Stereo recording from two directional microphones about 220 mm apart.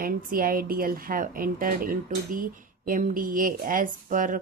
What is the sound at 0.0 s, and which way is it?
Speech, 40° right (ahead or behind).